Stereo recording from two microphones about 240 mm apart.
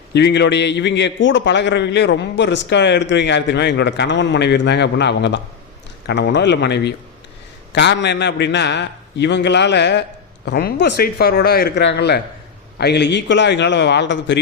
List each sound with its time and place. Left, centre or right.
0.1 s a man's voice: left